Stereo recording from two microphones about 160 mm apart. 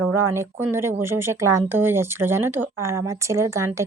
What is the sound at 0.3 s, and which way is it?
Speech, 15° right (ahead or behind).